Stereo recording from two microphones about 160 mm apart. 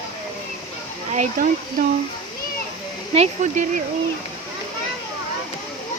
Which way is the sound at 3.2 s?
50° right (ahead or behind).